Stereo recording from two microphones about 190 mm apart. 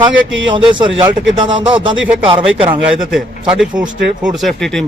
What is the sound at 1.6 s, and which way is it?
Speech, 25° right (ahead or behind).